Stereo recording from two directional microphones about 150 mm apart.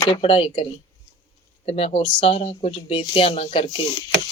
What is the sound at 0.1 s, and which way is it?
Speech, 40° left (ahead or behind).